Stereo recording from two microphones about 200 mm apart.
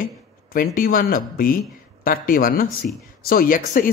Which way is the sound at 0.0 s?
45° left (ahead or behind).